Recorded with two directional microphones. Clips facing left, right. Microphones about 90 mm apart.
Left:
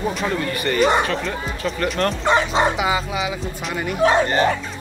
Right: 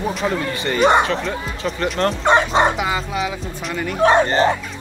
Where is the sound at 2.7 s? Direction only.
5° left (ahead or behind).